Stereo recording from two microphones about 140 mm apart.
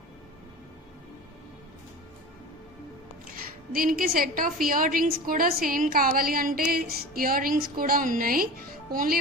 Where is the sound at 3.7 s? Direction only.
90° right.